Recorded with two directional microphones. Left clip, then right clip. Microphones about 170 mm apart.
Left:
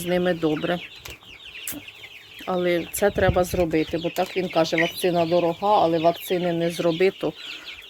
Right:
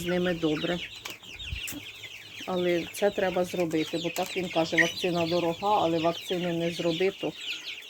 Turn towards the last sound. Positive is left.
turn(degrees=40)  # may be behind; listen again after turning